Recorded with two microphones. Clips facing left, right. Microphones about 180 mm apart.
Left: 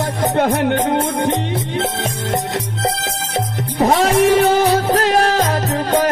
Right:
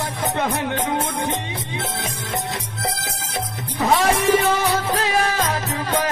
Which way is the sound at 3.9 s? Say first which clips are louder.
Left 4 dB; 65° left (ahead or behind).